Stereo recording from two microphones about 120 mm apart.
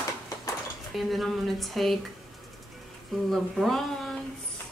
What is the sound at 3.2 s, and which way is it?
Speech, centre (ahead or behind).